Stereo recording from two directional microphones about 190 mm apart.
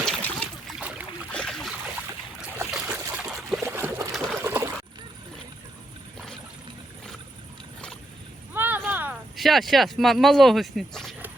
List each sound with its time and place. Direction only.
0.0 s trickle: 5° left (ahead or behind)
0.8 s boat: 5° right (ahead or behind)
1.3 s boat: 5° left (ahead or behind)
2.6 s a sound: 5° right (ahead or behind)
4.4 s trickle: 15° right (ahead or behind)
8.5 s a sound: 10° right (ahead or behind)
8.9 s speech: 10° right (ahead or behind)